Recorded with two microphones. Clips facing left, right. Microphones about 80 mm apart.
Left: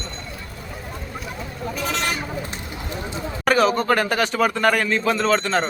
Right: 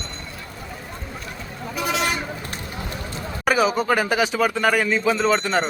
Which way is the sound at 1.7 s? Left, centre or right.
Centre.